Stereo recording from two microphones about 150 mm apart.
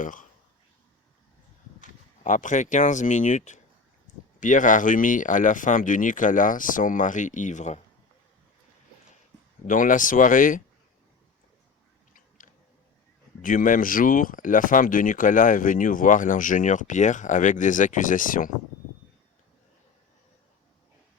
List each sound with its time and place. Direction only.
0.0 s speech: 60° left (ahead or behind)
1.8 s speech: 55° left (ahead or behind)
9.6 s speech: 60° left (ahead or behind)
12.4 s a sound: 70° left (ahead or behind)
13.4 s speech: 65° left (ahead or behind)